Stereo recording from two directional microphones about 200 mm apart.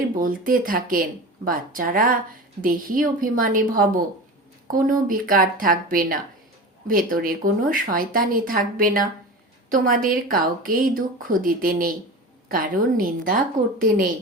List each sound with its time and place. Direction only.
0.2 s speech: 45° right (ahead or behind)